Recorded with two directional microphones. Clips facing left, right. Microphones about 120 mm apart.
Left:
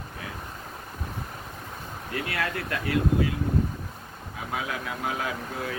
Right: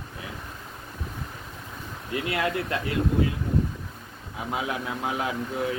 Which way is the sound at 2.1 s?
20° right (ahead or behind).